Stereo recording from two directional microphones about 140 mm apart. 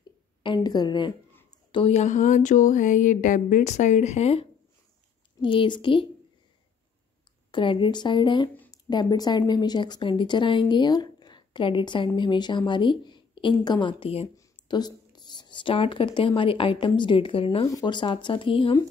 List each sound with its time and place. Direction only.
0.4 s a woman's voice: 30° left (ahead or behind)
1.7 s a sound: 45° left (ahead or behind)
5.4 s a woman's voice: 35° left (ahead or behind)
7.5 s a woman's voice: 35° left (ahead or behind)
14.3 s a woman's voice: 30° left (ahead or behind)
17.6 s a woman's voice: 30° left (ahead or behind)